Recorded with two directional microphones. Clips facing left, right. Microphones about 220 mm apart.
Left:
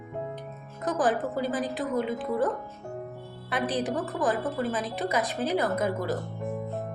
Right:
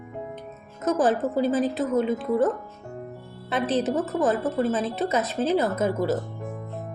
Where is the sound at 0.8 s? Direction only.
25° right (ahead or behind).